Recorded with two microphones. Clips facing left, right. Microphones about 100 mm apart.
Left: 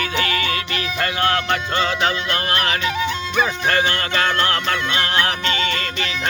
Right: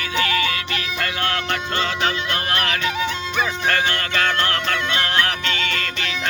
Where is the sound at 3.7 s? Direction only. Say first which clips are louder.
Left 2 dB; 25° left (ahead or behind).